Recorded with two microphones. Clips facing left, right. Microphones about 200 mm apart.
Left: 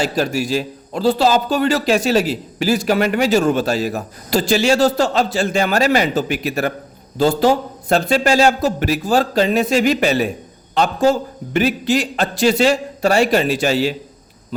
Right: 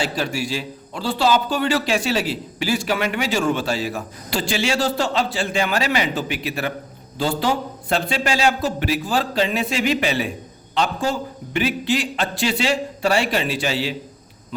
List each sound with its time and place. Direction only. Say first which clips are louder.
0.0 s a man's voice: left 5 dB; 40° left (ahead or behind)